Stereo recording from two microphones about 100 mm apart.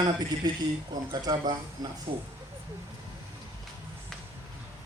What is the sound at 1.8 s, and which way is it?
Speech, 40° right (ahead or behind).